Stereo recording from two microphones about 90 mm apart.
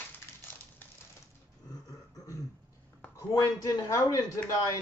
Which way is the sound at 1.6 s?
45° left (ahead or behind).